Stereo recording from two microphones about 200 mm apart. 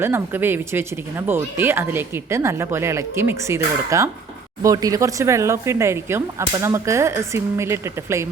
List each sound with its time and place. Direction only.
0.0 s speech: 10° right (ahead or behind)